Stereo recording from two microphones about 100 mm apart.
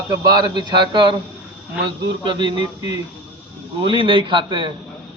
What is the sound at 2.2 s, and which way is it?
A man's voice, 50° right (ahead or behind).